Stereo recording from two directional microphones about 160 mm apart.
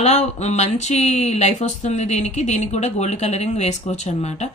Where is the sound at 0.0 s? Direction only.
45° left (ahead or behind).